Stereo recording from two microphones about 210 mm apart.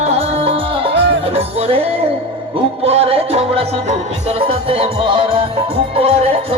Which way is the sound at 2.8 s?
30° right (ahead or behind).